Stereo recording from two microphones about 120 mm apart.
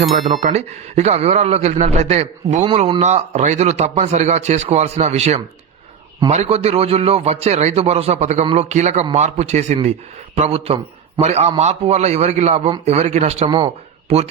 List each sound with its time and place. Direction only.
0.0 s speech: centre (ahead or behind)
0.3 s a man's voice: 80° right
10.3 s a man's voice: 60° right (ahead or behind)
11.2 s a man's voice: 70° right (ahead or behind)
13.4 s speech: 45° right (ahead or behind)
14.1 s a man's voice: 55° right (ahead or behind)